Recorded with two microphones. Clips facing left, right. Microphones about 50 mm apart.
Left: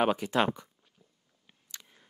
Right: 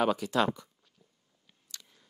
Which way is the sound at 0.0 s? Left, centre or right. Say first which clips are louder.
Left 1 dB; left.